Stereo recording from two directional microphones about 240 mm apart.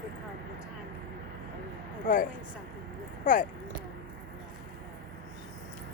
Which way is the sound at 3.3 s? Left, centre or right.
Left.